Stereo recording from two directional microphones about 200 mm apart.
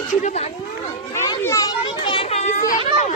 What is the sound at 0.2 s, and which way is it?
Speech, 35° left (ahead or behind).